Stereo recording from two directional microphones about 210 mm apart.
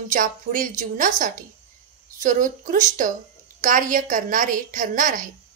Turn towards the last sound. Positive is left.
turn(degrees=-40)  # may be behind; listen again after turning